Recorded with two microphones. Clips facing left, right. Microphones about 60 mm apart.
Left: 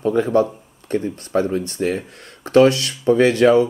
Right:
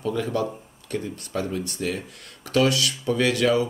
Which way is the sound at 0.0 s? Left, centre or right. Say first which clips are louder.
Left 9 dB; left.